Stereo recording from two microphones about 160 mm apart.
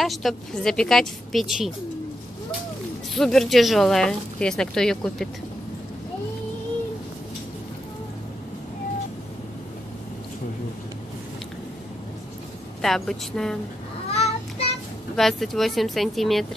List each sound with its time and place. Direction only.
0.0 s speech: centre (ahead or behind)
3.2 s speech: centre (ahead or behind)
12.8 s speech: centre (ahead or behind)
14.1 s child singing: 40° left (ahead or behind)
15.1 s speech: centre (ahead or behind)